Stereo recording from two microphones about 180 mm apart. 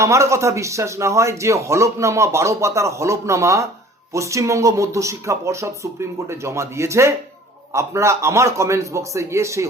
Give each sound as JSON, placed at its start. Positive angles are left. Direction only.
{"t": 0.0, "sound": "a man's voice", "side_deg": -15}